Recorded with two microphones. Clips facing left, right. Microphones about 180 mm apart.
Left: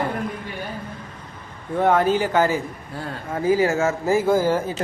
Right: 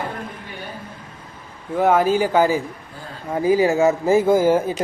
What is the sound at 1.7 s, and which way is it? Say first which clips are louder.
A woman's voice: right 2 dB; 5° right (ahead or behind).